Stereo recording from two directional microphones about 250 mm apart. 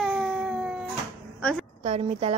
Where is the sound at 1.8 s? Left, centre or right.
Right.